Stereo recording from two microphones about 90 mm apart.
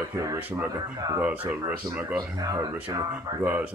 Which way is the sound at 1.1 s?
20° right (ahead or behind).